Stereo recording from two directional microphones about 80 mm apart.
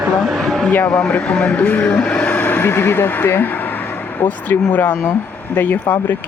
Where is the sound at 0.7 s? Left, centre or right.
Centre.